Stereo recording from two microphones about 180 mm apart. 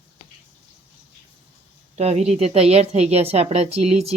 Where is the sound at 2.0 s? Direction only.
40° right (ahead or behind).